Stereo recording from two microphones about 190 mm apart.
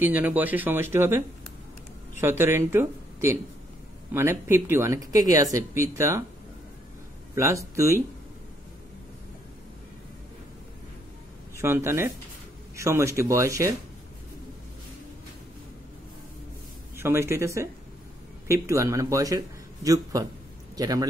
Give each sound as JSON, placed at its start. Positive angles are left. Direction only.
{"t": 0.0, "sound": "speech", "side_deg": -10}
{"t": 7.3, "sound": "speech", "side_deg": -15}
{"t": 11.5, "sound": "speech", "side_deg": -15}
{"t": 16.9, "sound": "speech", "side_deg": -15}